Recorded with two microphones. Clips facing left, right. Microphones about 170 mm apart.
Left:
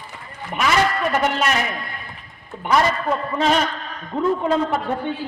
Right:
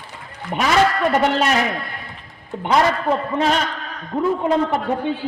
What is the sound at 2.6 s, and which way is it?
Speech, 25° right (ahead or behind).